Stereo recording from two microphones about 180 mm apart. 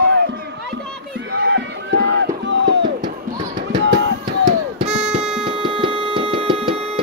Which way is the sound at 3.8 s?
90° right.